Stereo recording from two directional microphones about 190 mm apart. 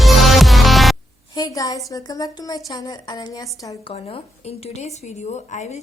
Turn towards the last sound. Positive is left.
turn(degrees=35)  # may be behind; listen again after turning